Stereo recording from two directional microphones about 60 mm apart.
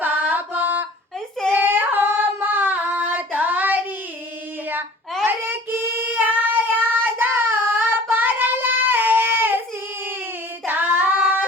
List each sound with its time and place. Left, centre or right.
0.0 s a sound: right
1.5 s singing: right
5.2 s child singing: right
10.7 s female singing: right